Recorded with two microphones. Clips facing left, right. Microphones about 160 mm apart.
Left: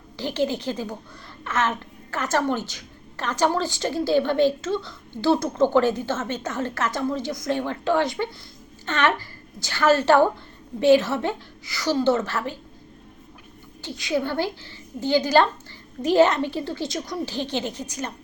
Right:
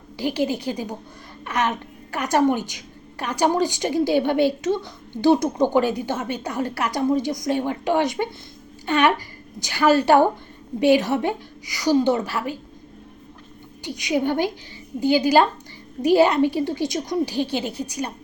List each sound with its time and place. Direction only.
0.2 s a woman's voice: 10° right (ahead or behind)
13.8 s a woman's voice: 15° right (ahead or behind)